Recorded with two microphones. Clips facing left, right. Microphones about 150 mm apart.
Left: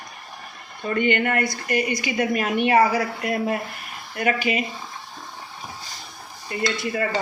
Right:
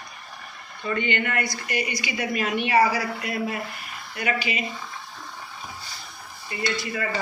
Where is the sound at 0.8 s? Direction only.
50° left (ahead or behind).